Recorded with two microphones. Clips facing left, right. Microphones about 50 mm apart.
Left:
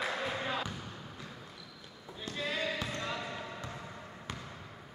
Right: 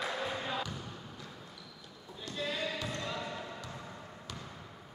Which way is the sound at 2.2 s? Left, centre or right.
Left.